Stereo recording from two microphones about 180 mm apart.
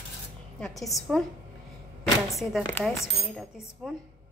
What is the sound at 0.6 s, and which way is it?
Speech, centre (ahead or behind).